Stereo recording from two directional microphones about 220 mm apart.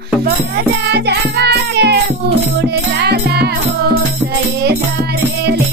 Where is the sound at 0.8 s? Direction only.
50° right (ahead or behind).